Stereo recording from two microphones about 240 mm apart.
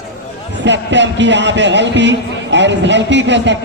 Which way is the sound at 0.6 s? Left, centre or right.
Right.